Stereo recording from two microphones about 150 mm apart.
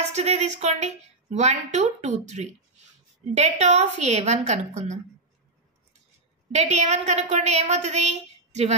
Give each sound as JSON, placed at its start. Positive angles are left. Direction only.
{"t": 0.1, "sound": "a woman's voice", "side_deg": -50}
{"t": 6.5, "sound": "a woman's voice", "side_deg": -45}